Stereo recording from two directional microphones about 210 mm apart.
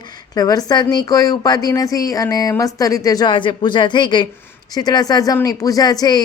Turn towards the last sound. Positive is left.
turn(degrees=20)  # may be behind; listen again after turning